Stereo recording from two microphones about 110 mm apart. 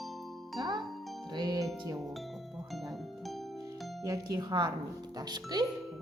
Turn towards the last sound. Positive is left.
turn(degrees=-40)  # may be behind; listen again after turning